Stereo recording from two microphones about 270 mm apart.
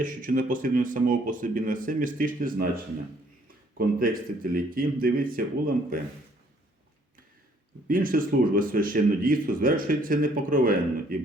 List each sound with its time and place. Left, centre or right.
0.0 s speech: right
7.9 s speech: right